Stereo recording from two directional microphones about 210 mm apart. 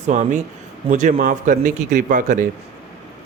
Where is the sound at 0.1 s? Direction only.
35° right (ahead or behind).